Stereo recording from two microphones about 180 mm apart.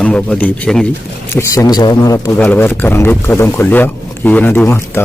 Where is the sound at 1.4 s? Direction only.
20° left (ahead or behind).